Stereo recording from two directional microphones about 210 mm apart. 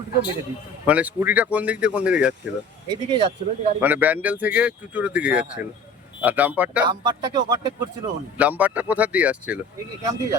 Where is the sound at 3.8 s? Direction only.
10° right (ahead or behind).